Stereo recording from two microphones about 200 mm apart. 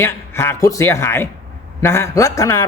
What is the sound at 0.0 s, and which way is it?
A man's voice, 10° left (ahead or behind).